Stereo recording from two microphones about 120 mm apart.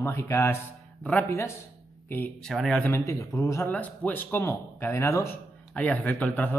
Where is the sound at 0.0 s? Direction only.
20° left (ahead or behind).